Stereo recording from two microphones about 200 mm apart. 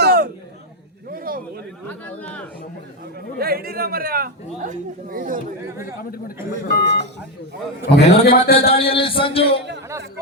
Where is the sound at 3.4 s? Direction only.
50° right (ahead or behind).